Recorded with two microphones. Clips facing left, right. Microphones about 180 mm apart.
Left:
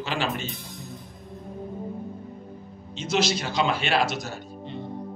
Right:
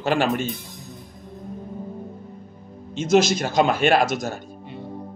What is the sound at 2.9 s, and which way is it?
Speech, 50° right (ahead or behind).